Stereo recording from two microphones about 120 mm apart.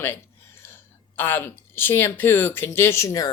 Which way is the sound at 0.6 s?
20° left (ahead or behind).